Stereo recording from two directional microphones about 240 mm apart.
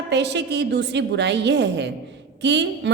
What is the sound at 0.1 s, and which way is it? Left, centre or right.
A woman's voice, right.